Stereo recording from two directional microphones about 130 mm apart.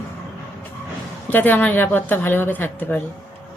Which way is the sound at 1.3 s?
15° left (ahead or behind).